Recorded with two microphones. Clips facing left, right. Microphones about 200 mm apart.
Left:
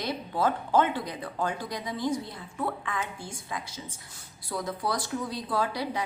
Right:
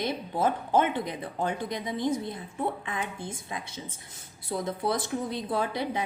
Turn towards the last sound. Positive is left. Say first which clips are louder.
# even
turn(degrees=-20)  # may be behind; listen again after turning